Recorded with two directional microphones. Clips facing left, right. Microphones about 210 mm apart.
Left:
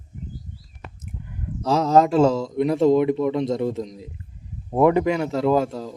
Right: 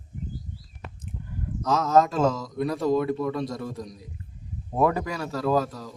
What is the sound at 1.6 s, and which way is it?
Speech, 30° left (ahead or behind).